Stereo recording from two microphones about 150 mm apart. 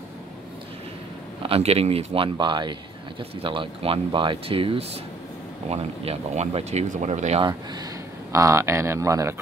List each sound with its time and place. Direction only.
1.4 s speech: 40° right (ahead or behind)
8.3 s speech: 20° right (ahead or behind)